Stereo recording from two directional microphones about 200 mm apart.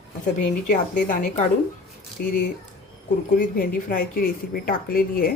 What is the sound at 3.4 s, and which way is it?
A woman's voice, 45° left (ahead or behind).